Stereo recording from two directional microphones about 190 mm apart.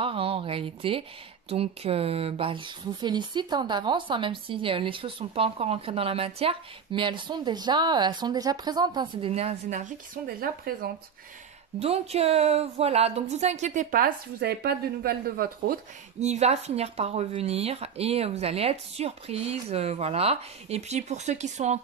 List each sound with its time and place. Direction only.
0.0 s speech: 30° right (ahead or behind); by 10.9 s 50° right (ahead or behind)
11.8 s speech: 30° right (ahead or behind); by 15.8 s 50° right (ahead or behind)
16.2 s speech: 35° right (ahead or behind)